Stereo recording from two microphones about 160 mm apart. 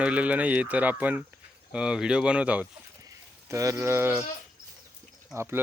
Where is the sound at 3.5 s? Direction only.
20° right (ahead or behind).